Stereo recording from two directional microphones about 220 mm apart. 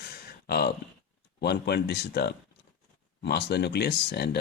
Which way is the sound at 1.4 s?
50° left (ahead or behind).